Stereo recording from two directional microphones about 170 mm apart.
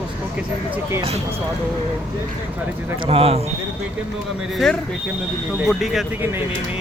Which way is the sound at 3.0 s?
35° right (ahead or behind).